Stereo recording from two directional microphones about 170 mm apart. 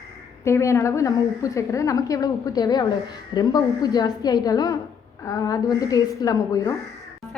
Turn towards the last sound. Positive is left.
turn(degrees=20)  # may be behind; listen again after turning